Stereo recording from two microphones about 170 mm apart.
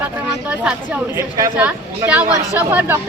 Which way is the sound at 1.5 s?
10° right (ahead or behind).